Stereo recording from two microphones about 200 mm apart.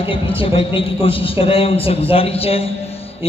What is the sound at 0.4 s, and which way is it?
A man's voice, 25° left (ahead or behind).